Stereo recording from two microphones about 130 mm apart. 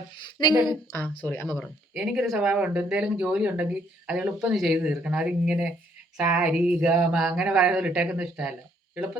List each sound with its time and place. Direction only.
1.0 s speech: 15° left (ahead or behind)
1.5 s speech: centre (ahead or behind)